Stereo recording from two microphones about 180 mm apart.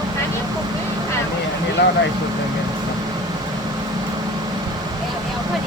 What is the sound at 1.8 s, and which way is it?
Vehicle, 70° left (ahead or behind).